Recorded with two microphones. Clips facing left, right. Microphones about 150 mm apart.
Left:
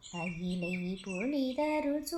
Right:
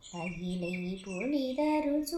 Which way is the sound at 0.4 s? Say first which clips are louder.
Right 1 dB; 10° right (ahead or behind).